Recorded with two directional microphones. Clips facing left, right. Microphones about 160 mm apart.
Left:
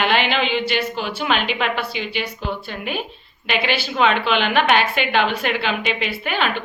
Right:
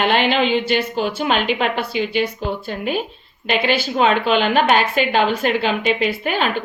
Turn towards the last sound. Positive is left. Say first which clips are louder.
# right 3 dB
turn(degrees=-40)  # may be behind; listen again after turning